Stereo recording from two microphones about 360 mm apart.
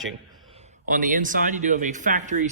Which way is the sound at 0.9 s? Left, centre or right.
Right.